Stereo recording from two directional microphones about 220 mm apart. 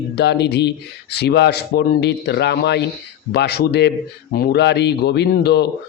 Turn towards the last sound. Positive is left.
turn(degrees=50)  # may be behind; listen again after turning